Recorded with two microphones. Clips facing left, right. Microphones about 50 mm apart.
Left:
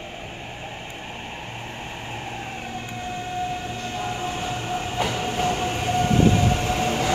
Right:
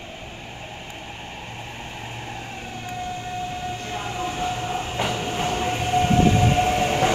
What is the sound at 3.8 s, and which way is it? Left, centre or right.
Train, right.